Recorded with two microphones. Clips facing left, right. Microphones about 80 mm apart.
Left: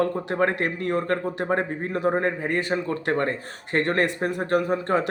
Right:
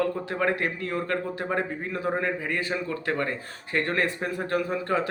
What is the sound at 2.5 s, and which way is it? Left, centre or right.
A man's voice, left.